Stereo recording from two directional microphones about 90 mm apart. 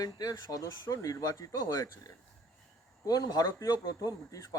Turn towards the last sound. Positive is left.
turn(degrees=40)  # may be behind; listen again after turning